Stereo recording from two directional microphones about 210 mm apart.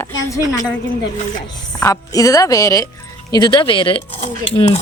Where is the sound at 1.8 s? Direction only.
15° left (ahead or behind).